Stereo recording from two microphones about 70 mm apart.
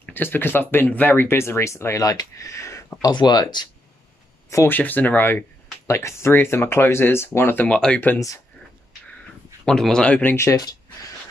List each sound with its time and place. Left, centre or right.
0.1 s speech: left
2.0 s speech: left
3.0 s speech: left
4.6 s speech: left
5.9 s speech: left
7.6 s speech: centre
9.7 s speech: centre